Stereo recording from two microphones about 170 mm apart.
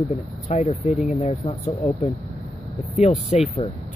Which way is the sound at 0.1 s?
40° left (ahead or behind).